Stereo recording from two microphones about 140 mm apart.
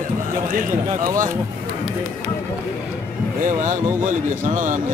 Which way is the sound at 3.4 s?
65° right (ahead or behind).